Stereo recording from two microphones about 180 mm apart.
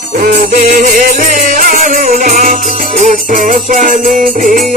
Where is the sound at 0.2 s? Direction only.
45° right (ahead or behind).